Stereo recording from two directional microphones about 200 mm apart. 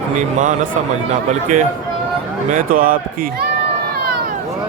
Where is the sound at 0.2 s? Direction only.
40° right (ahead or behind).